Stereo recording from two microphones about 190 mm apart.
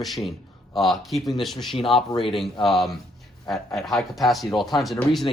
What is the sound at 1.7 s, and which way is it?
Speech, 30° left (ahead or behind).